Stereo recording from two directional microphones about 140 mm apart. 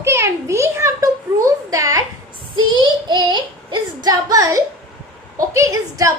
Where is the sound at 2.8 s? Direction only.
35° right (ahead or behind).